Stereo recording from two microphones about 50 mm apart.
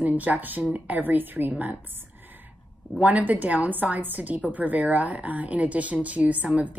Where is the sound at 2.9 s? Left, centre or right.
Right.